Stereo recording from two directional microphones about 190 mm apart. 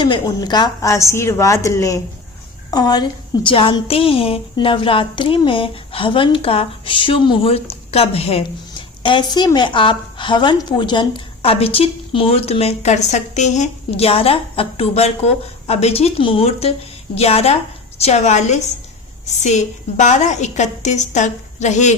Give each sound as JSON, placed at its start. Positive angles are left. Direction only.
{"t": 0.0, "sound": "a woman's voice", "side_deg": 20}